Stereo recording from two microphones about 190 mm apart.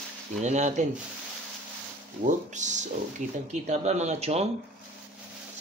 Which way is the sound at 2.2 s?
40° right (ahead or behind).